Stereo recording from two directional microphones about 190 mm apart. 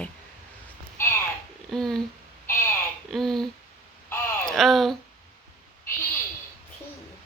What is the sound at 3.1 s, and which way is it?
Speech, centre (ahead or behind).